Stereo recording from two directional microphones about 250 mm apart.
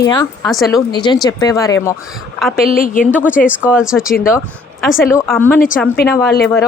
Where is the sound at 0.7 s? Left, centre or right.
Centre.